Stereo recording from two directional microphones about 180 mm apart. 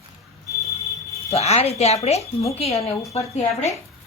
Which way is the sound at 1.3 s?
35° left (ahead or behind).